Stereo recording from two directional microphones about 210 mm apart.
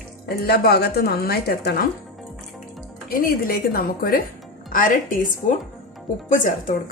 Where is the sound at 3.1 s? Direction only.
45° left (ahead or behind).